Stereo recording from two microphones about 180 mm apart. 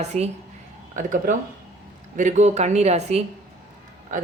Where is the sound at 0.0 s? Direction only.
40° right (ahead or behind).